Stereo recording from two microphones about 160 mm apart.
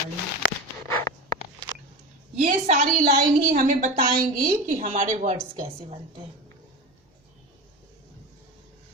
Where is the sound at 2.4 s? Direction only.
50° right (ahead or behind).